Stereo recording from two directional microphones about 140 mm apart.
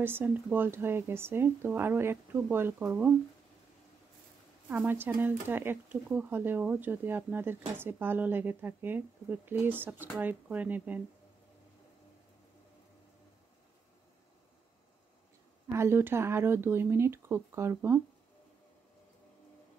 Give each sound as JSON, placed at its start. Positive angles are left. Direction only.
{"t": 0.0, "sound": "speech", "side_deg": -15}
{"t": 4.6, "sound": "speech", "side_deg": -15}
{"t": 15.7, "sound": "speech", "side_deg": -15}